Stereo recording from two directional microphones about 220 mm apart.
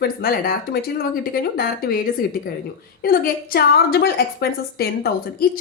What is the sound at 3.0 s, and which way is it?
Speech, 45° left (ahead or behind).